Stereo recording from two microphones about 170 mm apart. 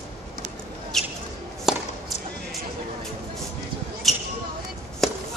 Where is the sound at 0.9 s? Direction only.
Centre (ahead or behind).